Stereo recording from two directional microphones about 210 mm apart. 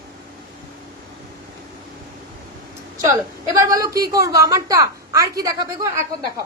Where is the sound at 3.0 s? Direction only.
15° right (ahead or behind).